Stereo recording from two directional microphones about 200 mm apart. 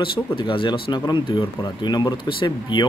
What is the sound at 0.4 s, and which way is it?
Speech, 25° left (ahead or behind).